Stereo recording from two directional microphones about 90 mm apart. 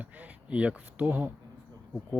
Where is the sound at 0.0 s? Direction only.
15° right (ahead or behind).